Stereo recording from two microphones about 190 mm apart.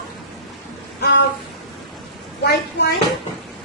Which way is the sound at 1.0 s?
60° left (ahead or behind).